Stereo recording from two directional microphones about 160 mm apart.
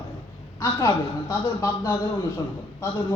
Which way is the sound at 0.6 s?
20° left (ahead or behind).